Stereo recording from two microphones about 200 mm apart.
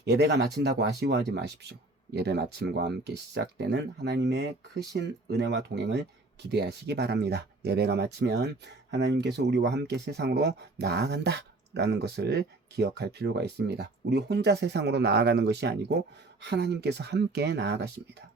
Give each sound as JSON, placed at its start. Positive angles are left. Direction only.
{"t": 0.0, "sound": "speech", "side_deg": -55}